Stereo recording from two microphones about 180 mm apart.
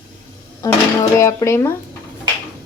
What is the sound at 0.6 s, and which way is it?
Speech, 15° left (ahead or behind).